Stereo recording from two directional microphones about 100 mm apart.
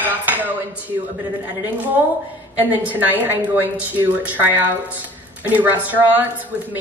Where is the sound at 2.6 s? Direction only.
15° right (ahead or behind).